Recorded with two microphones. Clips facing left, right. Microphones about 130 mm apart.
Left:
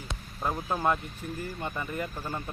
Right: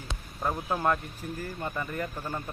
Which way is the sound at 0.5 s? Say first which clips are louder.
Even; 5° right (ahead or behind).